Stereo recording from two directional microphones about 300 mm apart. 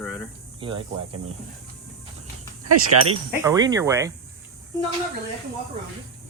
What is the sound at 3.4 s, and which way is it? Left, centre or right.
Speech, centre.